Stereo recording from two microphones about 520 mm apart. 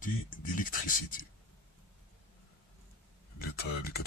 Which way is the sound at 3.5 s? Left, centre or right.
Centre.